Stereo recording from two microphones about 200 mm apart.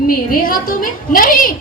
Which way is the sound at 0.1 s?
45° left (ahead or behind).